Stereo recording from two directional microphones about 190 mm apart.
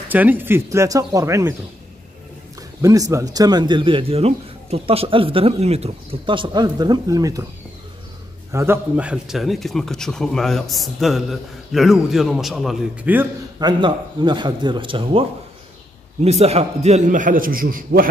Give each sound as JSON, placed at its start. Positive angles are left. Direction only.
{"t": 0.1, "sound": "speech", "side_deg": -10}
{"t": 2.8, "sound": "speech", "side_deg": -15}
{"t": 8.5, "sound": "a man's voice", "side_deg": -15}
{"t": 13.6, "sound": "a man's voice", "side_deg": -25}